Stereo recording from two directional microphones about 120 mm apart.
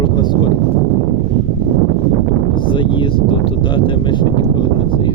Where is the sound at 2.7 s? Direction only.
45° left (ahead or behind).